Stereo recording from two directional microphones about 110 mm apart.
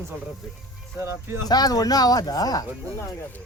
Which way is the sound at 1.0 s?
25° right (ahead or behind).